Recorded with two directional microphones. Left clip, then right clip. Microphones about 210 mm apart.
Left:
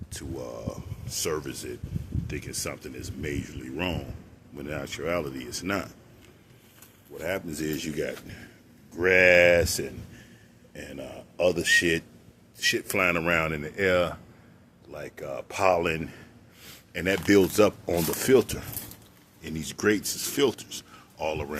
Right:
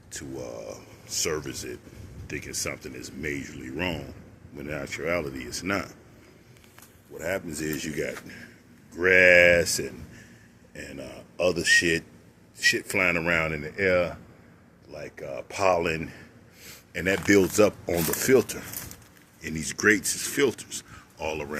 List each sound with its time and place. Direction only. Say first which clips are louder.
0.1 s speech: right 1 dB; centre (ahead or behind)
7.2 s a man's voice: right 1 dB; centre (ahead or behind)